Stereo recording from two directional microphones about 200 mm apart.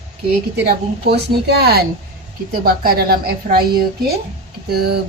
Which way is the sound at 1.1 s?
55° right (ahead or behind).